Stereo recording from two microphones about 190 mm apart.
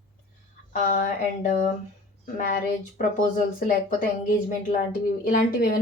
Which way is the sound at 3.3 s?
45° left (ahead or behind).